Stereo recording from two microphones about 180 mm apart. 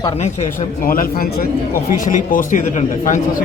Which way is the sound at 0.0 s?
35° left (ahead or behind).